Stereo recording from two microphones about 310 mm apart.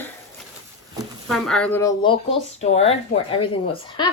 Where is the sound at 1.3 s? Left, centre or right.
Centre.